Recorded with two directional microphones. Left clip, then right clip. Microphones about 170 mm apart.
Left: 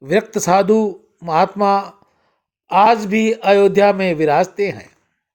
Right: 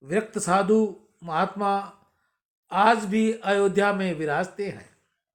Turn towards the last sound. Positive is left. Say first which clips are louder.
# left 12 dB
turn(degrees=40)  # may be behind; listen again after turning